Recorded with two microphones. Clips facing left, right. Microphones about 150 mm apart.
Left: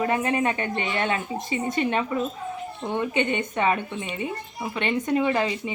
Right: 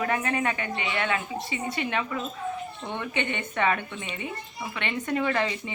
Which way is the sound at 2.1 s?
25° left (ahead or behind).